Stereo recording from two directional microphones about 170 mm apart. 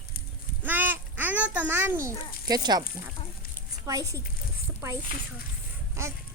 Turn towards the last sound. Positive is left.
turn(degrees=-15)  # may be behind; listen again after turning